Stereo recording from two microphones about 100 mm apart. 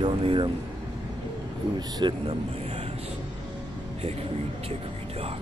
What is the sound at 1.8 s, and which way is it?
Speech, 45° right (ahead or behind).